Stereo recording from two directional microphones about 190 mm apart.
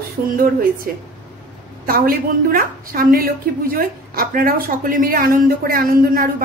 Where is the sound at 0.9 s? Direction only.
50° right (ahead or behind).